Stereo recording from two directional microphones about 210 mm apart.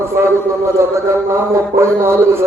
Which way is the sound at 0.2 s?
10° right (ahead or behind).